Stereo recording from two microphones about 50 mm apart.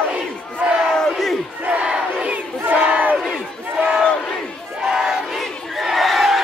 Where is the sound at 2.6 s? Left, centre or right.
Right.